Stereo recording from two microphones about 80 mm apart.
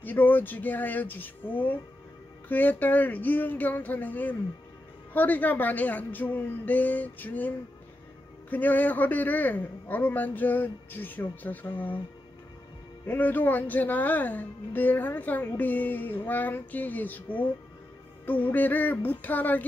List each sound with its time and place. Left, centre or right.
0.0 s speech: left
13.0 s speech: left